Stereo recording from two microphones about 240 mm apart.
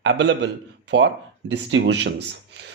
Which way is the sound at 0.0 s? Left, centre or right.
Right.